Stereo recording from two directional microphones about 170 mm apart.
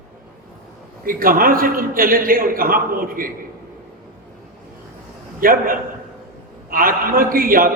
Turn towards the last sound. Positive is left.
turn(degrees=-55)  # may be behind; listen again after turning